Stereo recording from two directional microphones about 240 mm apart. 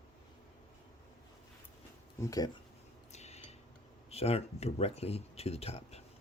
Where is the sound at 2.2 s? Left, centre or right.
Centre.